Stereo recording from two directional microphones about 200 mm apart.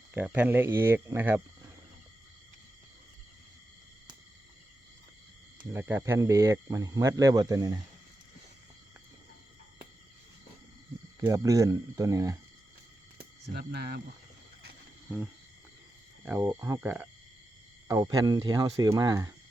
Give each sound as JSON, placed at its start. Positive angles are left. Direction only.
{"t": 0.1, "sound": "speech", "side_deg": -10}
{"t": 5.7, "sound": "speech", "side_deg": -15}
{"t": 11.3, "sound": "speech", "side_deg": -15}
{"t": 13.5, "sound": "speech", "side_deg": -55}
{"t": 16.2, "sound": "speech", "side_deg": -15}